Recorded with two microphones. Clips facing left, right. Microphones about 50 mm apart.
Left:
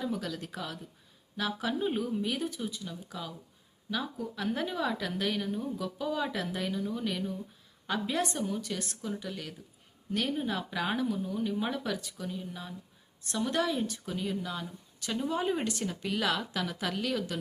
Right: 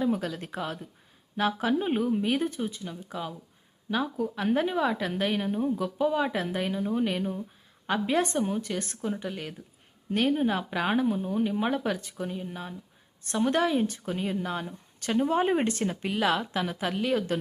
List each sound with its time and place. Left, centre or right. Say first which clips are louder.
0.1 s a woman's voice: right 6 dB; right